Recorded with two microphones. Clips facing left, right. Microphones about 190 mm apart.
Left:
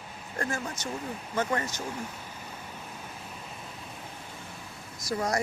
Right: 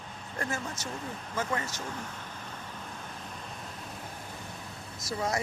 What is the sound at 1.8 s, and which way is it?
Vehicle, 10° left (ahead or behind).